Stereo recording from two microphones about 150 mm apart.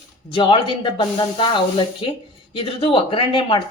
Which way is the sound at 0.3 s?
30° left (ahead or behind).